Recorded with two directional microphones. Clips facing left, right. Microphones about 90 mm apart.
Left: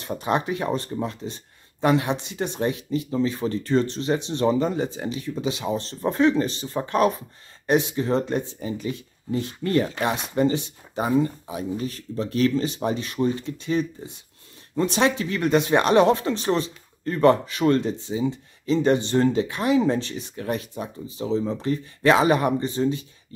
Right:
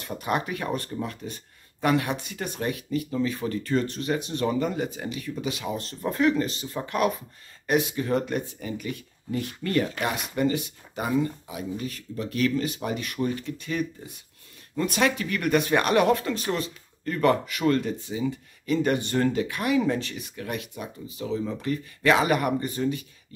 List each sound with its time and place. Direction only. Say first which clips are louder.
0.0 s speech: left 3 dB; 30° left (ahead or behind)